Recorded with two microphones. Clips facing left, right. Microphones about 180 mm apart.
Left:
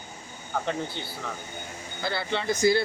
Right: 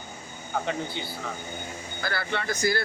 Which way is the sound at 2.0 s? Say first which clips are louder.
Left 2 dB; 25° left (ahead or behind).